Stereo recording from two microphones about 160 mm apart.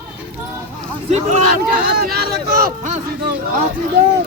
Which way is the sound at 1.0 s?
45° right (ahead or behind).